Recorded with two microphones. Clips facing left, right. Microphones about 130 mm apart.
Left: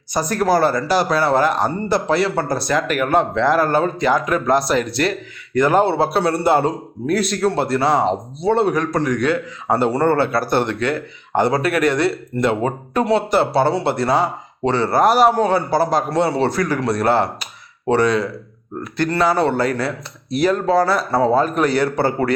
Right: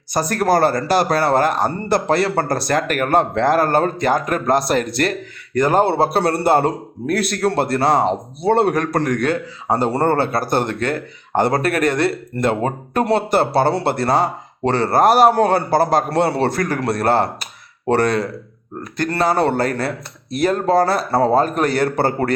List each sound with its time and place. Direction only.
0.1 s a man's voice: 55° right (ahead or behind)
5.9 s a man's voice: 50° right (ahead or behind)
9.6 s a man's voice: 40° right (ahead or behind)